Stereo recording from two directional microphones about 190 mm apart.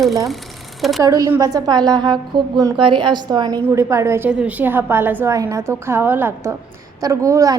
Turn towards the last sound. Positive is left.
turn(degrees=-15)  # may be behind; listen again after turning